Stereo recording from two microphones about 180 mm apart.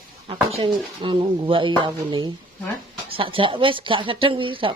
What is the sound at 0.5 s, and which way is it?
Speech, 30° right (ahead or behind).